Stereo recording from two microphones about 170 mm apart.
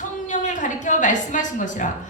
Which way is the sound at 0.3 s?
45° left (ahead or behind).